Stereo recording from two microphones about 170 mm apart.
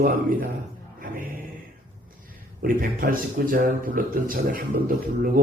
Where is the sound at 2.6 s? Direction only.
60° right (ahead or behind).